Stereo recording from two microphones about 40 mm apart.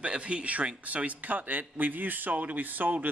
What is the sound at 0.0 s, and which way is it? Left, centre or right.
Speech, right.